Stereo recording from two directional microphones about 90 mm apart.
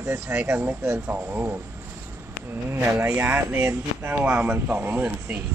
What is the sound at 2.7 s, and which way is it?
Speech, 25° right (ahead or behind).